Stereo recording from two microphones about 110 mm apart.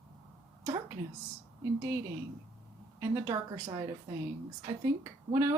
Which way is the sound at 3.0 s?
30° right (ahead or behind).